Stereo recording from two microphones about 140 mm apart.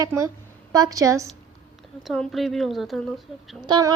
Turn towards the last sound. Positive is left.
turn(degrees=-30)  # may be behind; listen again after turning